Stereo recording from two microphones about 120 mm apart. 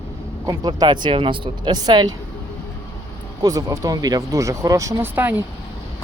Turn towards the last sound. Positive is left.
turn(degrees=-15)  # may be behind; listen again after turning